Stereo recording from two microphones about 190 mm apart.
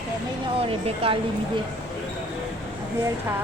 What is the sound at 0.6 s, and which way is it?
Speech, 30° right (ahead or behind).